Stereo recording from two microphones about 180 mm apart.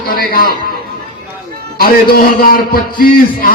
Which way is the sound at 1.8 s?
55° left (ahead or behind).